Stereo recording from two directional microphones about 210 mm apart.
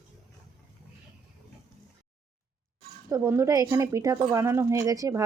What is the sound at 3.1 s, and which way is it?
Speech, 15° right (ahead or behind).